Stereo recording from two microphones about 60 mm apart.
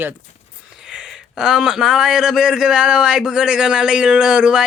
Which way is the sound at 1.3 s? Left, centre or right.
Centre.